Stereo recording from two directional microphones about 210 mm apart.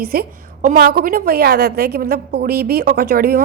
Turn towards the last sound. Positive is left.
turn(degrees=-45)  # may be behind; listen again after turning